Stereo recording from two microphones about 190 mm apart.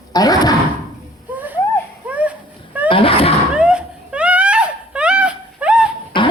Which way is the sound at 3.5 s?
5° right (ahead or behind).